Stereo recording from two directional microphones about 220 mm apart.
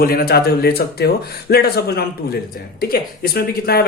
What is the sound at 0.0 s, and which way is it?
Speech, 40° left (ahead or behind).